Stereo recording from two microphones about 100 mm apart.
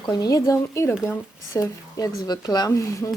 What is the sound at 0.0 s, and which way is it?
Speech, 40° left (ahead or behind).